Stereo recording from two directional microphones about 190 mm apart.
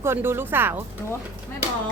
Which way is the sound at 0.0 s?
10° right (ahead or behind).